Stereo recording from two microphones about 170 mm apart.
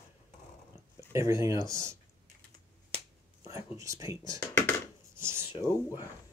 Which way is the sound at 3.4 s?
15° right (ahead or behind).